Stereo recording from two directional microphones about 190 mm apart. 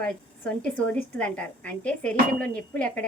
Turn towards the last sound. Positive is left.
turn(degrees=5)  # may be behind; listen again after turning